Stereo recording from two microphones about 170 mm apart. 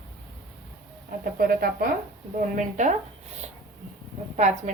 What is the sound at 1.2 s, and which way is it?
A woman's voice, 60° right (ahead or behind).